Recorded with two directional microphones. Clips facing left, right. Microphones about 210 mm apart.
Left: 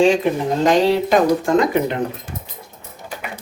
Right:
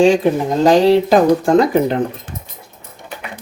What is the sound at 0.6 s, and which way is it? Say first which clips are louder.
Speech: right 5 dB; 35° right (ahead or behind).